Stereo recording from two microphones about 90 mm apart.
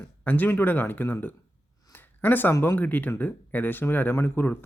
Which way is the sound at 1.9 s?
20° left (ahead or behind).